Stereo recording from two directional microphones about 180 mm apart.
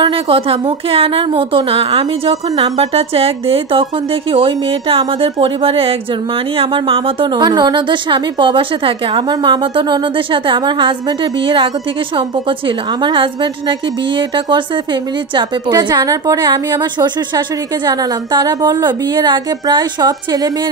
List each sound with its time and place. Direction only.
0.0 s a woman's voice: 30° right (ahead or behind)